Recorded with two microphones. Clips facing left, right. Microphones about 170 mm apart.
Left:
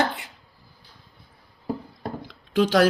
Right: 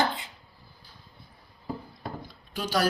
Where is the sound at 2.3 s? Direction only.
90° left.